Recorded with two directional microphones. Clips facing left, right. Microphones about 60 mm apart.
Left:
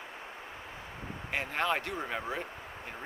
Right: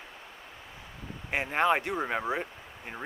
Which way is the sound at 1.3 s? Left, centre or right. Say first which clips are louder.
Right 5 dB; right.